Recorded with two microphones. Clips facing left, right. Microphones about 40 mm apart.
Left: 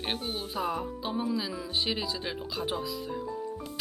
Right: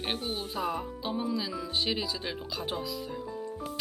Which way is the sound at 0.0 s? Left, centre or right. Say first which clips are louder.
Even; centre.